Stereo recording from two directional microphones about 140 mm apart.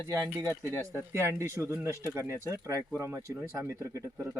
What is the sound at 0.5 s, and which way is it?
Speech, 20° left (ahead or behind).